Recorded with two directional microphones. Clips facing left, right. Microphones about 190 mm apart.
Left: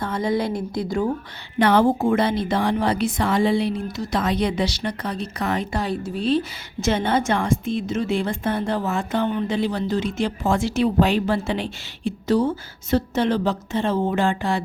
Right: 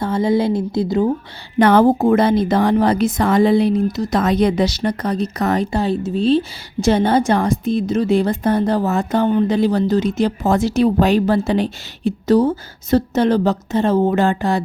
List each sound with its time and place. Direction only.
0.0 s a woman's voice: 25° right (ahead or behind)
1.5 s a woman's voice: 45° right (ahead or behind)
5.7 s a woman's voice: 25° right (ahead or behind)
6.8 s a woman's voice: 35° right (ahead or behind)